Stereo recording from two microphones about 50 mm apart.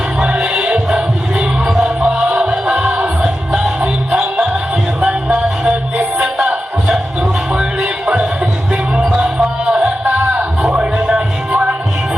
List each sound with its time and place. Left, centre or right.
0.2 s music: centre
2.0 s music: centre
7.2 s music: centre
10.2 s music: right
10.7 s music: centre